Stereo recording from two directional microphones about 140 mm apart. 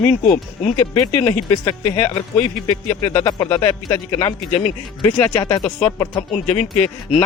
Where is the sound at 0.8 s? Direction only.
10° left (ahead or behind).